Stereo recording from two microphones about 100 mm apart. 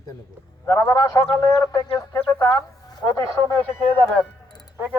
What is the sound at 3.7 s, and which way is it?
Speech, 5° right (ahead or behind).